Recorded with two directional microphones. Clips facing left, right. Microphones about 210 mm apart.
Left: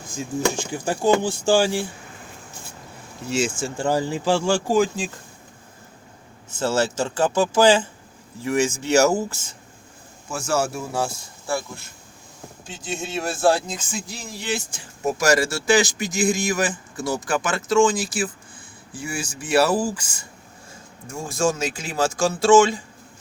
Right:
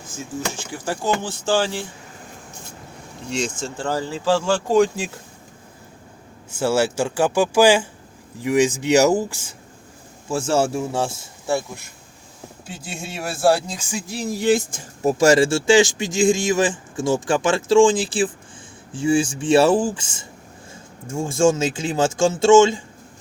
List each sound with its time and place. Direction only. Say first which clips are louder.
0.1 s speech: left 5 dB; 15° left (ahead or behind)
3.2 s speech: left 2 dB; 5° left (ahead or behind)
4.9 s speech: right 1 dB; 5° right (ahead or behind)
6.5 s speech: right 3 dB; 10° right (ahead or behind)
10.2 s speech: right 4 dB; 30° right (ahead or behind)
12.6 s speech: left 3 dB; 10° right (ahead or behind)
14.3 s speech: right 12 dB; 50° right (ahead or behind)
15.0 s speech: right 5 dB; 30° right (ahead or behind)